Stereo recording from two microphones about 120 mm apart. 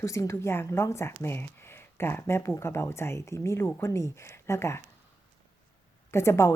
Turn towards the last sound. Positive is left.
turn(degrees=20)  # may be behind; listen again after turning